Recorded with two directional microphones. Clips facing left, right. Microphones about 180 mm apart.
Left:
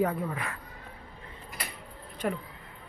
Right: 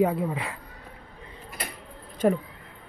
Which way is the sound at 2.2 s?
30° right (ahead or behind).